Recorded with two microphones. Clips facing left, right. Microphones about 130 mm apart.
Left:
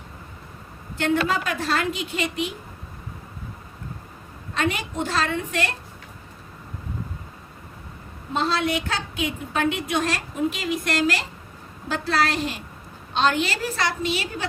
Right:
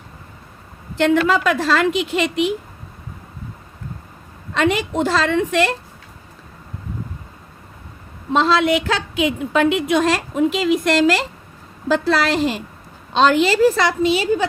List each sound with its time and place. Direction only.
0.9 s a woman's voice: 90° right
4.5 s a woman's voice: 90° right
8.3 s a woman's voice: 90° right